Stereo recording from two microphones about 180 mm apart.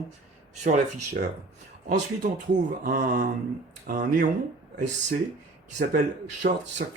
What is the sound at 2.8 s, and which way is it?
Speech, 50° right (ahead or behind).